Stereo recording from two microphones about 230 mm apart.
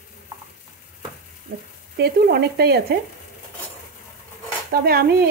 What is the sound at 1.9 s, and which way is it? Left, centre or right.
Stir, right.